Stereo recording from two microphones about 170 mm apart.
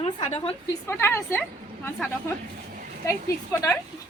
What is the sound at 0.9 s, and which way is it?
Speech, 15° left (ahead or behind).